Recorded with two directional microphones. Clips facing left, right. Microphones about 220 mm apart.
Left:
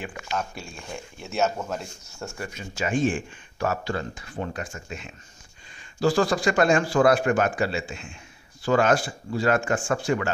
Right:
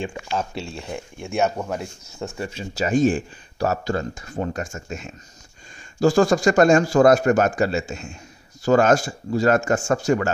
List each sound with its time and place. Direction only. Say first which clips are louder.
0.0 s a man's voice: right 4 dB; 25° right (ahead or behind); by 10.3 s 45° right (ahead or behind)